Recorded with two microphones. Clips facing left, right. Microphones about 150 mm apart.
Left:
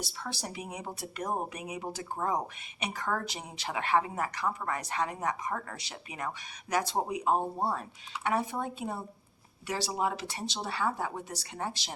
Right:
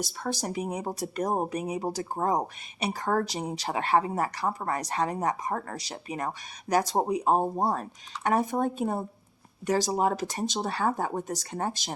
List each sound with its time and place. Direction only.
0.0 s speech: 45° right (ahead or behind)